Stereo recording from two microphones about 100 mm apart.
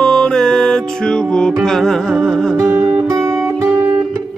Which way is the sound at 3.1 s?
25° right (ahead or behind).